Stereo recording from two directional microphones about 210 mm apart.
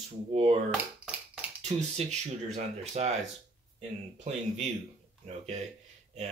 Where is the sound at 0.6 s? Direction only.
5° right (ahead or behind).